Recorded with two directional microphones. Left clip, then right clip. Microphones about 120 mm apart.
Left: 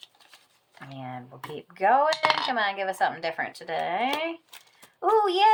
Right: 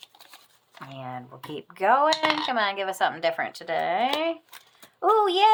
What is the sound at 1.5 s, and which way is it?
Speech, 45° right (ahead or behind).